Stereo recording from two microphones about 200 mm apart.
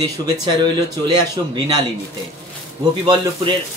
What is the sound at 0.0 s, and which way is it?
Speech, 20° right (ahead or behind).